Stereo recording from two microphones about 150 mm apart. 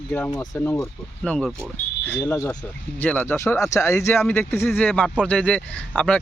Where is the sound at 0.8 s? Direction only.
5° left (ahead or behind).